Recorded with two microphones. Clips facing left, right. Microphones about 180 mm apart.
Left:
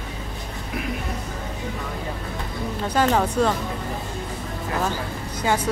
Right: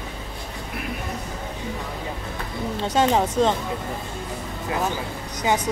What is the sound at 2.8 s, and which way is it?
Speech, 25° right (ahead or behind).